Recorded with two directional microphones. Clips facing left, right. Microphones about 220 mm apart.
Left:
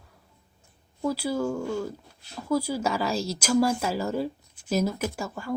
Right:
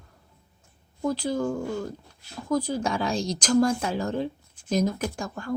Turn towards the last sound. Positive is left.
turn(degrees=5)  # may be behind; listen again after turning